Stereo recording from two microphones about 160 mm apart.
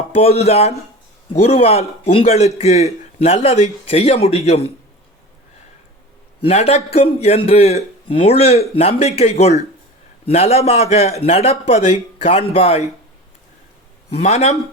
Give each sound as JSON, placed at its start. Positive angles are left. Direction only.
{"t": 0.1, "sound": "a man's voice", "side_deg": 40}
{"t": 6.4, "sound": "a man's voice", "side_deg": 40}
{"t": 14.2, "sound": "speech", "side_deg": 40}